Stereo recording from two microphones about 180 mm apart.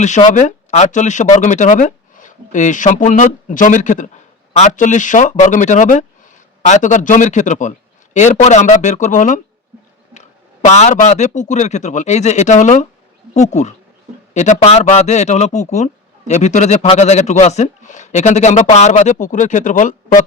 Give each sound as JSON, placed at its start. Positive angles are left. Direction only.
{"t": 0.0, "sound": "a man's voice", "side_deg": 40}